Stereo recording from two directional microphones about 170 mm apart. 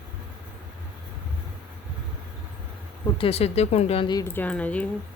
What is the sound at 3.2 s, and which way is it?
A woman's voice, 35° left (ahead or behind).